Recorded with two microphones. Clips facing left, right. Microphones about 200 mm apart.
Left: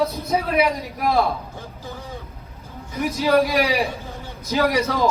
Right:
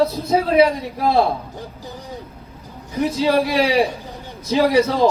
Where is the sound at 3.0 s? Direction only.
30° right (ahead or behind).